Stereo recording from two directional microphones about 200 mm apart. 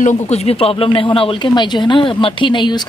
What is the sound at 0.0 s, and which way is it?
Speech, 35° left (ahead or behind).